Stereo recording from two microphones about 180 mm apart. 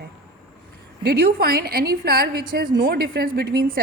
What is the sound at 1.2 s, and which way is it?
A woman's voice, 55° right (ahead or behind).